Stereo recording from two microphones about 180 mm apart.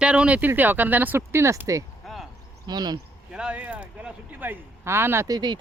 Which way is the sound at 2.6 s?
25° right (ahead or behind).